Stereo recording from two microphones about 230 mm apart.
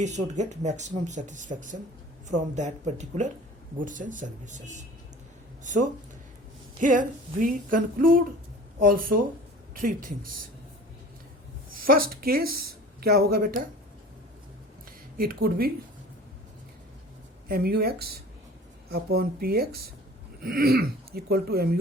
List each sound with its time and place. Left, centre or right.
0.0 s speech: right
6.7 s speech: right
11.8 s speech: right
15.2 s speech: right
17.5 s speech: right